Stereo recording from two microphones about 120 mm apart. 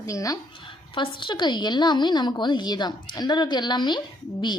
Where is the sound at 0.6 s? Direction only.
40° left (ahead or behind).